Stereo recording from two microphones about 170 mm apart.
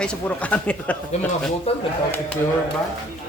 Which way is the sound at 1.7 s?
35° left (ahead or behind).